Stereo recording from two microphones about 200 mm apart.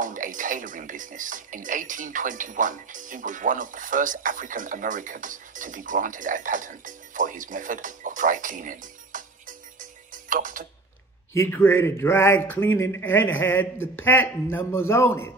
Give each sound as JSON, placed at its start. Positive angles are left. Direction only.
{"t": 0.0, "sound": "speech", "side_deg": -40}
{"t": 11.3, "sound": "a man's voice", "side_deg": 10}